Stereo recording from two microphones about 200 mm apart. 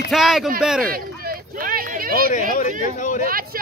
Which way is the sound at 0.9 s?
50° right (ahead or behind).